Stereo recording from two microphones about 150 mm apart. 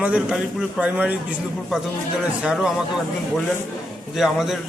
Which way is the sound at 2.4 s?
5° right (ahead or behind).